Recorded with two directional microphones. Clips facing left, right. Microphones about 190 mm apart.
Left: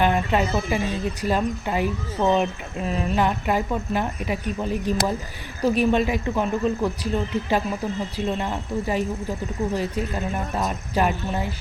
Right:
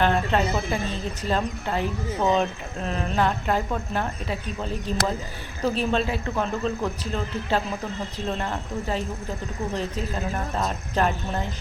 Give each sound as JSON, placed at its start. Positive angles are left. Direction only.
{"t": 0.0, "sound": "speech", "side_deg": 10}